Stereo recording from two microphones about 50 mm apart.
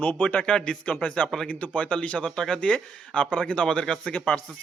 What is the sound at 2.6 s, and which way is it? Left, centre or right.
Speech, left.